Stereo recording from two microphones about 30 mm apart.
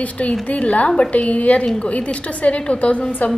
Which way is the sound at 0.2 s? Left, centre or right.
Left.